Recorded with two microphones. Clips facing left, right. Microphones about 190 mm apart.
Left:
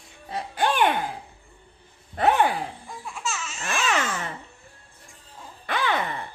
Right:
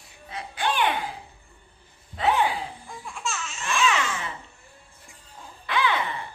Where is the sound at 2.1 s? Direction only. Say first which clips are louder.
Left 3 dB; 50° left (ahead or behind).